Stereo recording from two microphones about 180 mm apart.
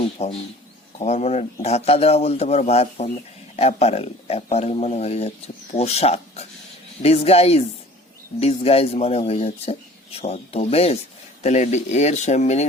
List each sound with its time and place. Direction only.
0.2 s speech: 35° left (ahead or behind)